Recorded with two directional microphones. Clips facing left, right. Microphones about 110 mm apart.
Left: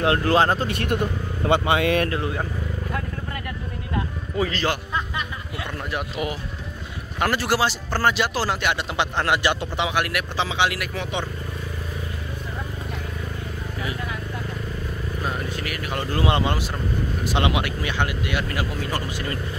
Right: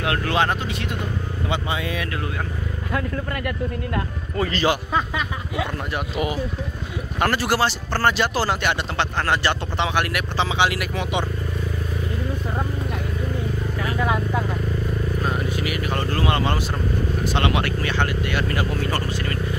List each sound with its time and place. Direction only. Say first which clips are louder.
0.0 s speech: left 3 dB; 30° left (ahead or behind)
0.7 s speech: left 3 dB; 55° left (ahead or behind)
1.5 s speech: left 8 dB; 70° left (ahead or behind)
4.4 s speech: right 3 dB; centre (ahead or behind)
7.2 s speech: right 1 dB; centre (ahead or behind)
8.9 s speech: even; 10° left (ahead or behind); by 11.2 s 5° right (ahead or behind)
13.9 s vehicle: right 9 dB; 90° right
15.2 s vehicle: right 2 dB; 5° right (ahead or behind)
15.9 s speech: right 2 dB; 5° left (ahead or behind)
16.2 s speech: left 2 dB; 20° left (ahead or behind)